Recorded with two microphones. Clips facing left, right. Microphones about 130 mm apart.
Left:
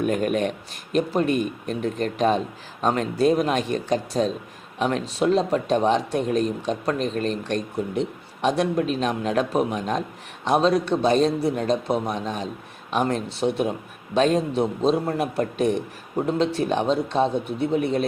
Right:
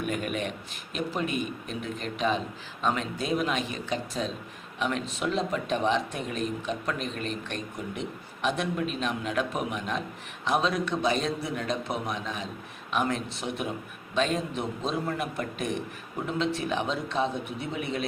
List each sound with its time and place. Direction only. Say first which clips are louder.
0.0 s a man's voice: left 8 dB; 45° left (ahead or behind)